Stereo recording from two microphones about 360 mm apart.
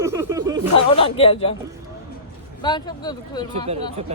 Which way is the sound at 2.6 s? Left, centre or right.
Centre.